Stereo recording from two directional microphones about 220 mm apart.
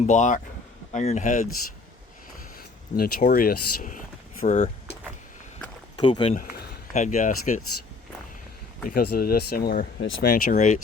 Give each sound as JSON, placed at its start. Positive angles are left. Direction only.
{"t": 0.0, "sound": "speech", "side_deg": 35}
{"t": 2.9, "sound": "speech", "side_deg": 45}
{"t": 4.4, "sound": "speech", "side_deg": 25}
{"t": 6.0, "sound": "speech", "side_deg": 20}
{"t": 6.3, "sound": "speech", "side_deg": 35}
{"t": 8.9, "sound": "speech", "side_deg": 45}